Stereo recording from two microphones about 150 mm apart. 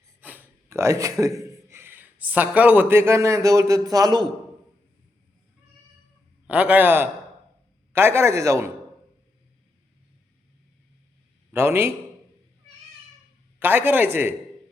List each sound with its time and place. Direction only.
0.2 s speech: 10° right (ahead or behind); by 4.3 s 25° right (ahead or behind)
6.5 s speech: 10° right (ahead or behind)
11.5 s speech: 15° right (ahead or behind)
13.6 s speech: 15° right (ahead or behind)